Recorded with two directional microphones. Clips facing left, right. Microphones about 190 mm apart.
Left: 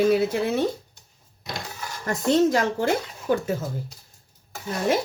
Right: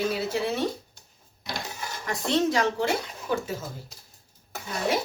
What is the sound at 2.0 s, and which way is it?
Speech, 45° left (ahead or behind).